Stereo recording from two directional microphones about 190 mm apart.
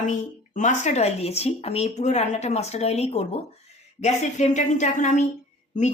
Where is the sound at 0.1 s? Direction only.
40° left (ahead or behind).